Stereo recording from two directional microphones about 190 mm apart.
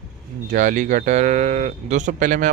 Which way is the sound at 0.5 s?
40° right (ahead or behind).